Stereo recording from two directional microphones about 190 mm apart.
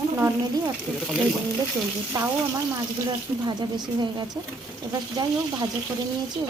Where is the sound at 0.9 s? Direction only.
5° left (ahead or behind).